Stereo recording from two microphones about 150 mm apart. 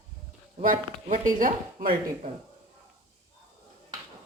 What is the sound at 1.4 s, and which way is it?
Speech, 65° right (ahead or behind).